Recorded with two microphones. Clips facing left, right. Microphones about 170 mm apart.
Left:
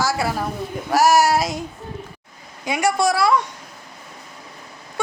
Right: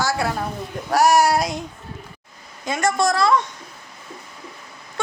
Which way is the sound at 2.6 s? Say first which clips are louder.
Left 1 dB; 10° left (ahead or behind).